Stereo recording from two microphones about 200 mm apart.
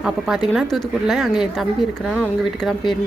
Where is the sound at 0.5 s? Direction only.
Centre (ahead or behind).